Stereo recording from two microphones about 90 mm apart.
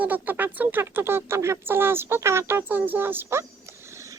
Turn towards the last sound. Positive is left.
turn(degrees=-25)  # may be behind; listen again after turning